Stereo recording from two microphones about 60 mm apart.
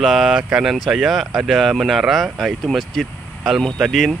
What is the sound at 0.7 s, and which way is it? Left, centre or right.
Speech, centre.